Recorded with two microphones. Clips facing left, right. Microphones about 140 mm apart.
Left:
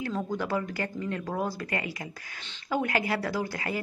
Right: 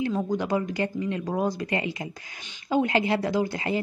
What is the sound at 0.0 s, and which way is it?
A woman's voice, 20° right (ahead or behind).